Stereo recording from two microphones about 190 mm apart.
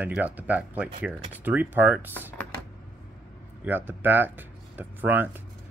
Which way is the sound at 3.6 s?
10° right (ahead or behind).